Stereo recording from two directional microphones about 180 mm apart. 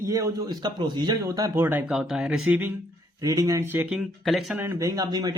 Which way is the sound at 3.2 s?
20° right (ahead or behind).